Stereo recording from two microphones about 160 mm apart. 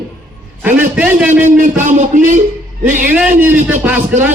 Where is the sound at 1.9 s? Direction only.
50° right (ahead or behind).